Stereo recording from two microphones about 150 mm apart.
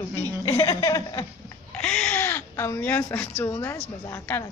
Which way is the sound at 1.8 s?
5° left (ahead or behind).